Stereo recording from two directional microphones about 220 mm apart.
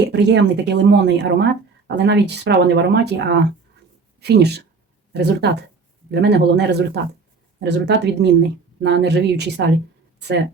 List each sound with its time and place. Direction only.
0.0 s speech: 50° right (ahead or behind)